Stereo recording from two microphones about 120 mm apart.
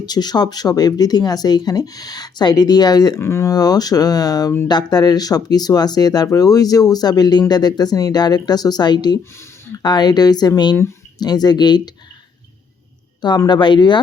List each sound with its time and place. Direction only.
0.0 s speech: 35° left (ahead or behind)
3.2 s speech: 20° left (ahead or behind)
13.5 s speech: 40° left (ahead or behind)